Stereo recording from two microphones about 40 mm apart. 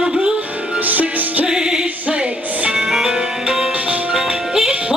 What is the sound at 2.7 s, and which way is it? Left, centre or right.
Music, centre.